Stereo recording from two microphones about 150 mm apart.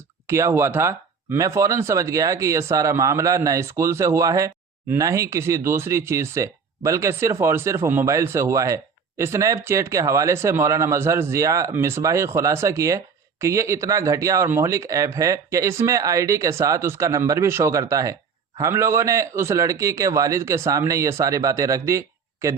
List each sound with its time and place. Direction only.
0.3 s speech: 20° right (ahead or behind)